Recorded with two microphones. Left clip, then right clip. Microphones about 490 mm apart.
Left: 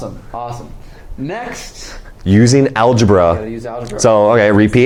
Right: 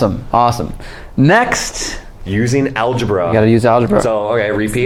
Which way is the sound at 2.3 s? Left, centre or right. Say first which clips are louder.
Left 4 dB; left.